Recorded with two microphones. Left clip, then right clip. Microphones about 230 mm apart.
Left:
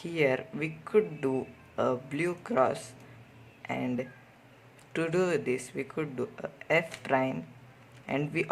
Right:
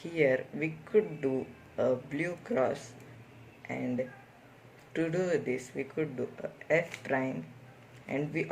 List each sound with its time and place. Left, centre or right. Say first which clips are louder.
0.0 s a man's voice: even; left